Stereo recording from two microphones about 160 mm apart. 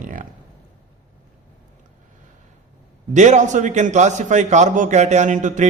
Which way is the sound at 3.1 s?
50° right (ahead or behind).